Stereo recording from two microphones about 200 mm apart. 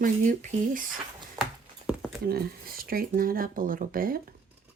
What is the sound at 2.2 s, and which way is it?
Speech, 50° right (ahead or behind).